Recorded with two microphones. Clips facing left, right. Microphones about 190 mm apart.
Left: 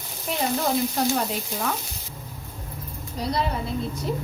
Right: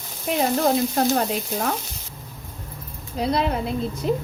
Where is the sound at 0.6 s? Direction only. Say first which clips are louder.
Right 4 dB; 50° right (ahead or behind).